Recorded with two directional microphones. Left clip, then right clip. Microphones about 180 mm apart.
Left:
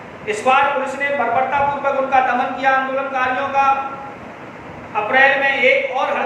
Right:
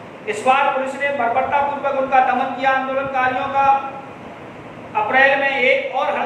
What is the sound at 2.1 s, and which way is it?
Speech, 10° left (ahead or behind).